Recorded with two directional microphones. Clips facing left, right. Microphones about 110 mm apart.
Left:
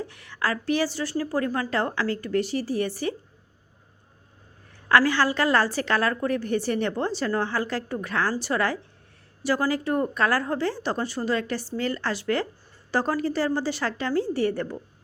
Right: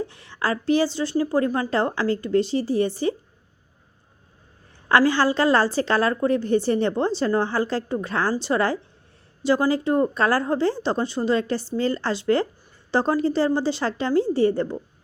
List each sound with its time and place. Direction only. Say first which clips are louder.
0.0 s a woman's voice: right 2 dB; 30° right (ahead or behind)
4.9 s a woman's voice: right 2 dB; 30° right (ahead or behind)